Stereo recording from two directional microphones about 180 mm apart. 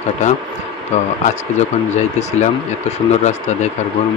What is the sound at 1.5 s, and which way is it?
Speech, 40° left (ahead or behind).